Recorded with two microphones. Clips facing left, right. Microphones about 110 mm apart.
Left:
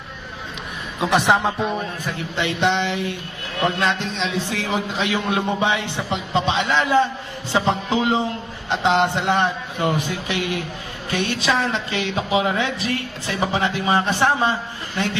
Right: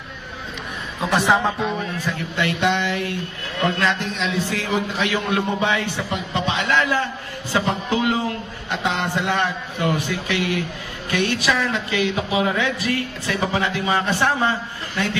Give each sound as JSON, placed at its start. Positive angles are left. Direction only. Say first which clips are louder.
{"t": 1.0, "sound": "a woman's voice", "louder": "left 1 dB", "side_deg": 20}